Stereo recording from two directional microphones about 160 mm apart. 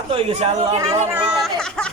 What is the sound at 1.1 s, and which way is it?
Speech, 10° right (ahead or behind).